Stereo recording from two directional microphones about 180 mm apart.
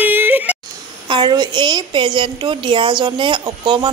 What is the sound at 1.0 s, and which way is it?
A woman's voice, 25° right (ahead or behind).